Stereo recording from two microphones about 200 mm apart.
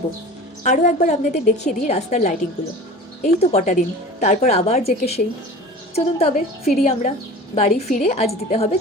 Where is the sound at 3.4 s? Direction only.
35° left (ahead or behind).